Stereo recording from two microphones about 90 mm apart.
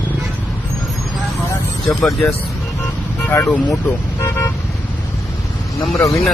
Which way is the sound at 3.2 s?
20° left (ahead or behind).